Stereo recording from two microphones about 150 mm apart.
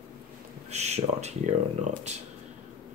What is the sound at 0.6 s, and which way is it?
Speech, 45° right (ahead or behind).